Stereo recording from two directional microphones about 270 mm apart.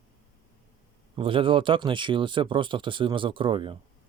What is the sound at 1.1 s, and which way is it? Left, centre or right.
Speech, centre.